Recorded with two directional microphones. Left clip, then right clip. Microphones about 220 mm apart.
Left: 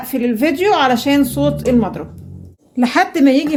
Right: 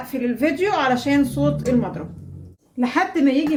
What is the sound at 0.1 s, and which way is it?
A woman's voice, 50° left (ahead or behind).